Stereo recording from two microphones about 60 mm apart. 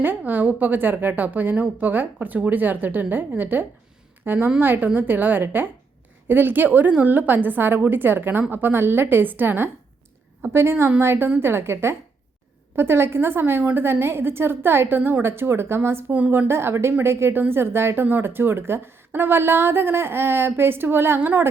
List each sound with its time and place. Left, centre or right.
0.0 s a woman's voice: right
10.4 s a woman's voice: right